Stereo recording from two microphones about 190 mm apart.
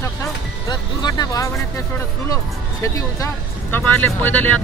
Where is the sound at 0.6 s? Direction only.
20° left (ahead or behind).